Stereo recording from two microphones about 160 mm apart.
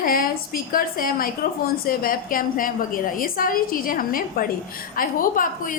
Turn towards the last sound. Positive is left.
turn(degrees=60)  # may be behind; listen again after turning